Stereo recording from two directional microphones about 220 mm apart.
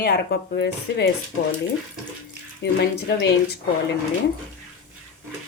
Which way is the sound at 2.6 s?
50° left (ahead or behind).